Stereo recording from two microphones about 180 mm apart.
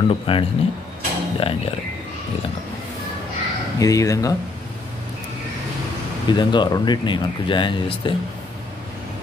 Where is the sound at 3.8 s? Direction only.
20° left (ahead or behind).